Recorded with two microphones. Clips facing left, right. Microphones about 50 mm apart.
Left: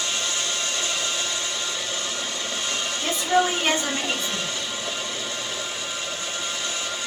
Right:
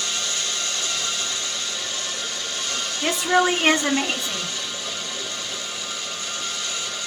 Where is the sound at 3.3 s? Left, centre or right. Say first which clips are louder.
Right 1 dB; right.